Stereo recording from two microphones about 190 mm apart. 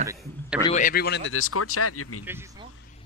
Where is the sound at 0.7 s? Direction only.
50° left (ahead or behind); by 1.5 s 90° left.